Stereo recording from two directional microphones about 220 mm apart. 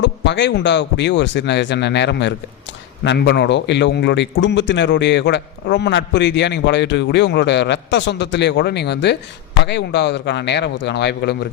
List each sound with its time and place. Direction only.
0.0 s a man's voice: 55° left (ahead or behind)